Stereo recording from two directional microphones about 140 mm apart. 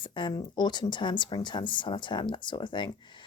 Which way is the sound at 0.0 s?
35° left (ahead or behind).